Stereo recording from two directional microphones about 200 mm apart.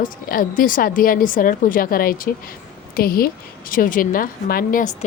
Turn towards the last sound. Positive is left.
turn(degrees=40)  # may be behind; listen again after turning